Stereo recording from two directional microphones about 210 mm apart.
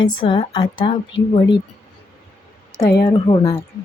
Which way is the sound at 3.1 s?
25° left (ahead or behind).